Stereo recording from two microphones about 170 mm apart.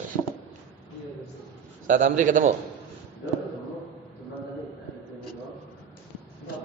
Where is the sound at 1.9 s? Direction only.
50° right (ahead or behind).